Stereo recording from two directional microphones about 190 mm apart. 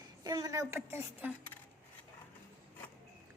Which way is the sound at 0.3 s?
20° right (ahead or behind).